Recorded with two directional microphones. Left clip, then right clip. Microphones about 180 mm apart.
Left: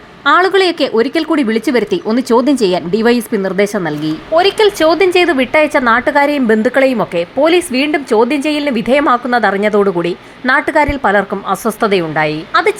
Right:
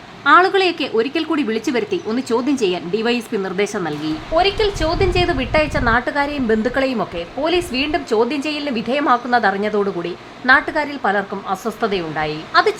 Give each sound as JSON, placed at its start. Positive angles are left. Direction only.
{"t": 0.3, "sound": "speech", "side_deg": 25}